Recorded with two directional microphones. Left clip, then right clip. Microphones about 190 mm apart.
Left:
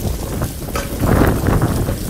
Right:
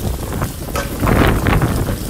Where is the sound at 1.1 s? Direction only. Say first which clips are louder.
Right 1 dB; 15° left (ahead or behind).